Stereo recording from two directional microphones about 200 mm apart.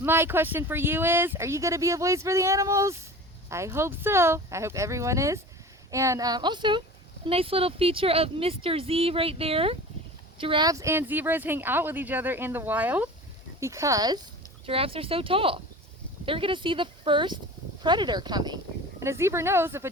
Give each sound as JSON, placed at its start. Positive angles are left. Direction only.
{"t": 0.0, "sound": "speech", "side_deg": -10}